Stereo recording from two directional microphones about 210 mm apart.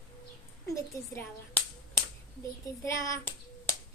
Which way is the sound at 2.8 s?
15° left (ahead or behind).